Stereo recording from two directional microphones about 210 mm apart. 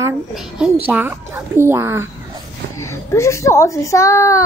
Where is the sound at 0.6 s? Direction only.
10° right (ahead or behind).